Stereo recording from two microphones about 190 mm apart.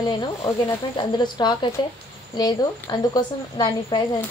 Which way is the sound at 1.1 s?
20° left (ahead or behind).